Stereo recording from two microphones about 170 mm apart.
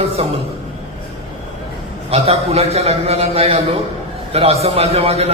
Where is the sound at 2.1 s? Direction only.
35° right (ahead or behind).